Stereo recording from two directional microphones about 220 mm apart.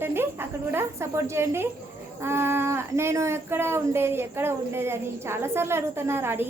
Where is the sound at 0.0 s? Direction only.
10° right (ahead or behind).